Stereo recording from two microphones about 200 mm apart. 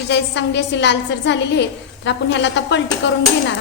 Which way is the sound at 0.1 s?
60° left (ahead or behind).